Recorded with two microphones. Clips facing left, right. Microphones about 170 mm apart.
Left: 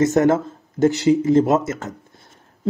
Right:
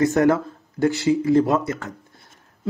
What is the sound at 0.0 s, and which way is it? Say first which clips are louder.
Speech: left 2 dB; 20° left (ahead or behind).